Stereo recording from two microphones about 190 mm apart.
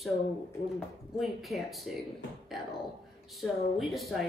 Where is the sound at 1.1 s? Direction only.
Centre (ahead or behind).